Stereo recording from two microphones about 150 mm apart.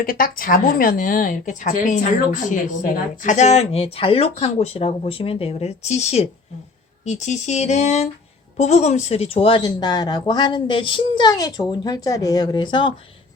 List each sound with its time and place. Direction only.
0.0 s a woman's voice: 70° left (ahead or behind); by 12.9 s 30° left (ahead or behind)